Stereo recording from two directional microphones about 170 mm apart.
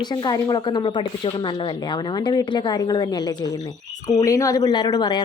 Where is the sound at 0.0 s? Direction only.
25° left (ahead or behind).